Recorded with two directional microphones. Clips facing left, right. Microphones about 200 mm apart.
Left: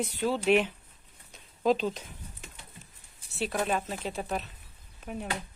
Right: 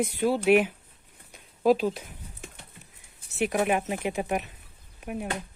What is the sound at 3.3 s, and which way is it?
Speech, 15° right (ahead or behind).